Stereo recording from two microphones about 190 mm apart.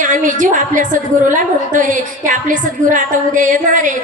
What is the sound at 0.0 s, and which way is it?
A woman's voice, 40° right (ahead or behind).